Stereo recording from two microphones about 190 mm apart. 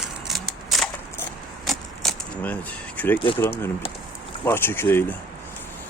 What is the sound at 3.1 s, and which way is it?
Speech, 25° left (ahead or behind).